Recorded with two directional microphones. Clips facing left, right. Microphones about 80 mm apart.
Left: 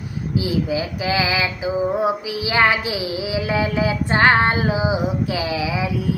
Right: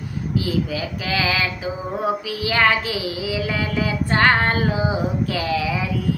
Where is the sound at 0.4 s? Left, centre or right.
Centre.